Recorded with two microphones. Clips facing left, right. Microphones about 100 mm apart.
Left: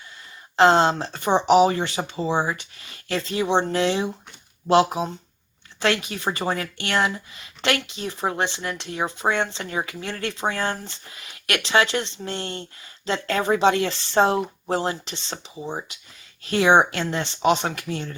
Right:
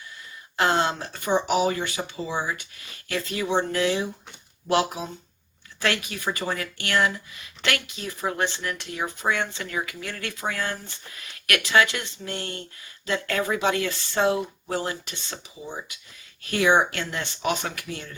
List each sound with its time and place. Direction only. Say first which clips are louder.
0.5 s speech: left 6 dB; 25° left (ahead or behind)